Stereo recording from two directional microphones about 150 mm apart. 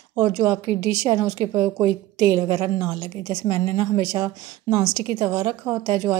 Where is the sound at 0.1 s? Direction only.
20° right (ahead or behind).